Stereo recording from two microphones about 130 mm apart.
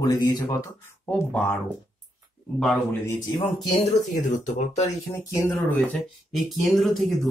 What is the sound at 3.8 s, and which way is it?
Speech, 70° left (ahead or behind).